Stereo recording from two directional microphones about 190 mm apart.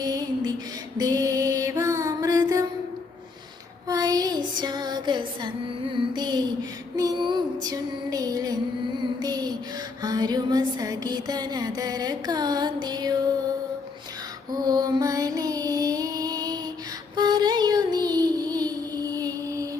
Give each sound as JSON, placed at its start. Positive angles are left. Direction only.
{"t": 0.0, "sound": "a sound", "side_deg": -20}
{"t": 0.9, "sound": "music", "side_deg": -20}
{"t": 3.8, "sound": "music", "side_deg": -20}
{"t": 6.9, "sound": "female singing", "side_deg": -20}
{"t": 9.2, "sound": "child singing", "side_deg": -20}
{"t": 10.0, "sound": "music", "side_deg": -20}
{"t": 14.5, "sound": "music", "side_deg": -20}
{"t": 17.2, "sound": "child singing", "side_deg": -20}